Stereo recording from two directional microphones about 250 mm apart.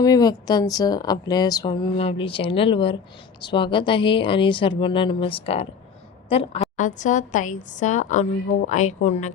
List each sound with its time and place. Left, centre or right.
0.0 s a woman's voice: centre